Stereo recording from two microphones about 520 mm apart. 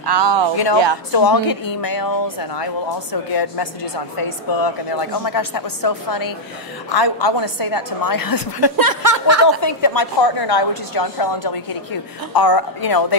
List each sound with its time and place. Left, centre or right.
0.0 s speech: right
1.1 s speech: left
8.7 s speech: right
9.6 s speech: left